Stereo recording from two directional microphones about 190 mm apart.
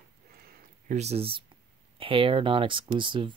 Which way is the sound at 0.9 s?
35° right (ahead or behind).